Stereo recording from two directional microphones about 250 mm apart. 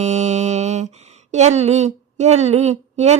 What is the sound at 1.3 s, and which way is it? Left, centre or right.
A woman's voice, right.